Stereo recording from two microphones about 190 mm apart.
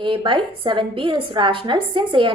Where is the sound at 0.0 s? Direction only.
25° right (ahead or behind).